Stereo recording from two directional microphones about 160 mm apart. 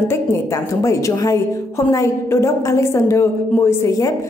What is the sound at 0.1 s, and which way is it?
A woman's voice, 15° left (ahead or behind).